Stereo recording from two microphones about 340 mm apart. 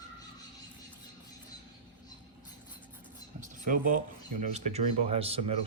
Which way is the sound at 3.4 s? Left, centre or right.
Right.